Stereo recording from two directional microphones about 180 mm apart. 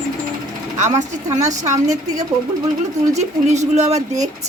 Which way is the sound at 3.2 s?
40° right (ahead or behind).